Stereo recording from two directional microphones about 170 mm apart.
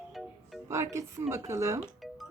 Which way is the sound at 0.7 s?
15° right (ahead or behind).